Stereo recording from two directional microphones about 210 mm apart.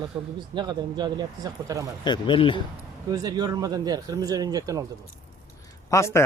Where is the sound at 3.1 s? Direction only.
20° right (ahead or behind).